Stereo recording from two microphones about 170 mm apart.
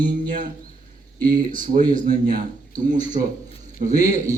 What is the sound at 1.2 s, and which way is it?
Speech, 55° right (ahead or behind).